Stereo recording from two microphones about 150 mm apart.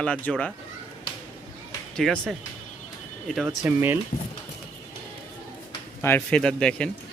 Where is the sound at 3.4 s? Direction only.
15° right (ahead or behind).